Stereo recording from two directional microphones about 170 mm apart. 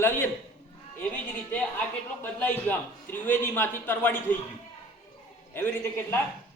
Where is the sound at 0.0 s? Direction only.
10° left (ahead or behind).